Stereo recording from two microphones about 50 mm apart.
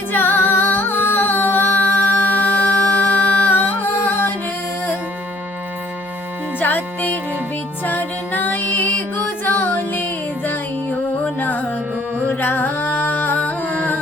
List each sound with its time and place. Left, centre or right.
0.1 s music: left
6.6 s music: left